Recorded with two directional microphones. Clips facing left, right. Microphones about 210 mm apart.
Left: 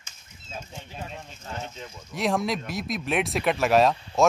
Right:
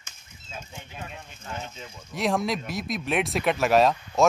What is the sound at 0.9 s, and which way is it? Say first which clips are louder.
Speech: left 2 dB; 30° left (ahead or behind).